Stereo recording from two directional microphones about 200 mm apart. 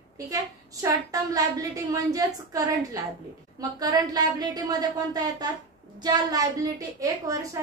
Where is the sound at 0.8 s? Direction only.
15° right (ahead or behind).